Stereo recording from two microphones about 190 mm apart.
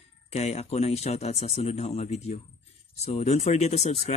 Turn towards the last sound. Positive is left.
turn(degrees=35)  # may be behind; listen again after turning